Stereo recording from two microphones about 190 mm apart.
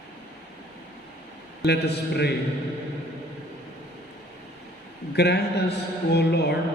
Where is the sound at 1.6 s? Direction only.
60° left (ahead or behind).